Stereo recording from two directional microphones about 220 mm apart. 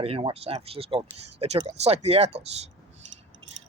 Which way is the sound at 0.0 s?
25° right (ahead or behind).